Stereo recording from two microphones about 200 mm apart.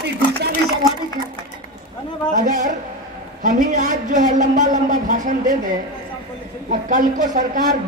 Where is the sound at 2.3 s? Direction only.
40° right (ahead or behind).